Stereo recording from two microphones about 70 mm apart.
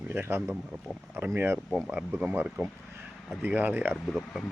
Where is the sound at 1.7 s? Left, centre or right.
Centre.